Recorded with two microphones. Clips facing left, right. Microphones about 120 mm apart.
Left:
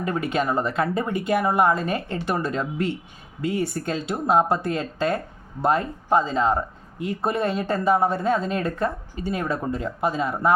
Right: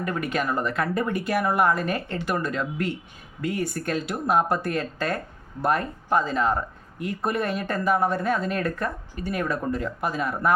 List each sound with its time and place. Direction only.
0.0 s speech: 25° left (ahead or behind)